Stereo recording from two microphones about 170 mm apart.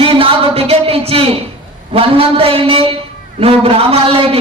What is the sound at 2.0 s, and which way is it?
Speech, 35° right (ahead or behind).